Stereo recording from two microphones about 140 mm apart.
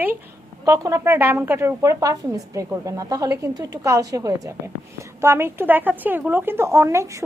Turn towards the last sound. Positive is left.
turn(degrees=-20)  # may be behind; listen again after turning